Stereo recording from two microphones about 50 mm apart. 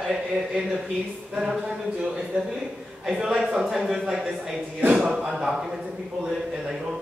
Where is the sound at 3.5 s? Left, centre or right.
Centre.